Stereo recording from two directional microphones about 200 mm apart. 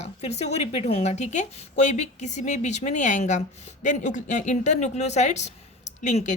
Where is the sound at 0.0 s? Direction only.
35° left (ahead or behind).